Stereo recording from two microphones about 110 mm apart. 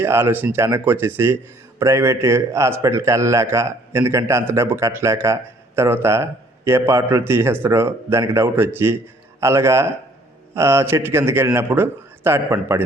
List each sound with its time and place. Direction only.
0.0 s a man's voice: 20° right (ahead or behind)